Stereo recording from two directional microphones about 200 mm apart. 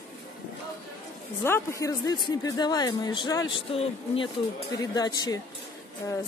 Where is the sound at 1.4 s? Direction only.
15° left (ahead or behind).